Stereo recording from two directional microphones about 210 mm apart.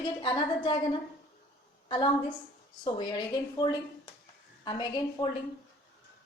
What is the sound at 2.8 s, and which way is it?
Speech, 20° left (ahead or behind).